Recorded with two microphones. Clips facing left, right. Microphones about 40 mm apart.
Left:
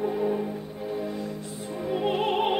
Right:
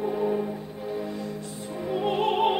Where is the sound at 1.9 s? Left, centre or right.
Centre.